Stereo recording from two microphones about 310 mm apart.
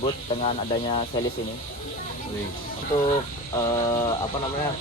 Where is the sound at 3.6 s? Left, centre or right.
Centre.